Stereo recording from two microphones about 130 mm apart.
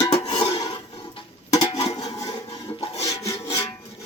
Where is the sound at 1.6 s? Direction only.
60° left (ahead or behind).